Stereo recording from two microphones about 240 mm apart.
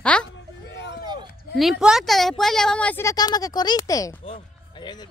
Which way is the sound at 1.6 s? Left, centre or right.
Centre.